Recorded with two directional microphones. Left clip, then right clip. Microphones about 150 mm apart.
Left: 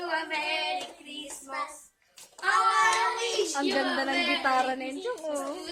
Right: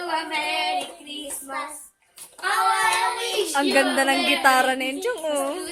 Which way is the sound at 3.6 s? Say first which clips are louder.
Right 12 dB; 25° right (ahead or behind).